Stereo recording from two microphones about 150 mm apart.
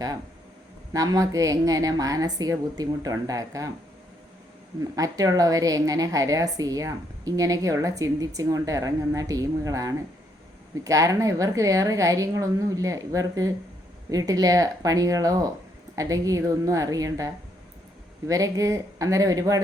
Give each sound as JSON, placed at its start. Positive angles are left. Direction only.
{"t": 0.9, "sound": "a woman's voice", "side_deg": -25}
{"t": 4.8, "sound": "a woman's voice", "side_deg": -25}